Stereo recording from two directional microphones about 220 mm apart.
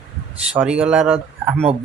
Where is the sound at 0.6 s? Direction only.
5° right (ahead or behind).